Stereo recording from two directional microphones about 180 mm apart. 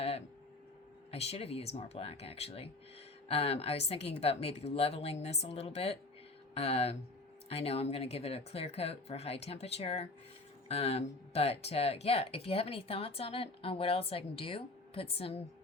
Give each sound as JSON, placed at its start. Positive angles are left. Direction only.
{"t": 1.1, "sound": "speech", "side_deg": 35}